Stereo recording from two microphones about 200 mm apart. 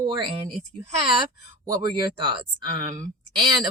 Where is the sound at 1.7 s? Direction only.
20° right (ahead or behind).